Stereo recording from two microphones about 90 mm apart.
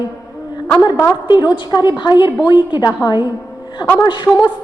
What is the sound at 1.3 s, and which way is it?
A woman's voice, 55° left (ahead or behind).